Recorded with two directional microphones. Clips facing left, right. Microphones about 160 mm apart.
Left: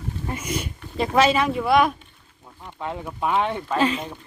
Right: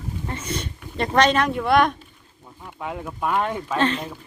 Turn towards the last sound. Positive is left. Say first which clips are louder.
# even
turn(degrees=5)  # may be behind; listen again after turning